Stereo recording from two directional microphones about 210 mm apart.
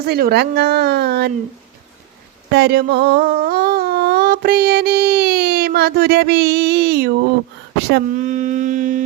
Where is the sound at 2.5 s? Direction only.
50° right (ahead or behind).